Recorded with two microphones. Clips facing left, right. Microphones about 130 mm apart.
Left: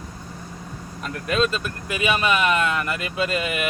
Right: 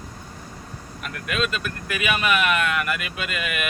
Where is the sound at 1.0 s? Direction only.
30° left (ahead or behind).